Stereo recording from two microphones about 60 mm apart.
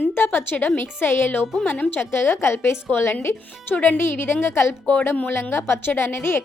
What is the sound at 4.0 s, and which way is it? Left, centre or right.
A woman's voice, left.